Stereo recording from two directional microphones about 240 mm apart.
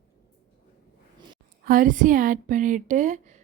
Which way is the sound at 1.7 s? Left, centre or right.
Right.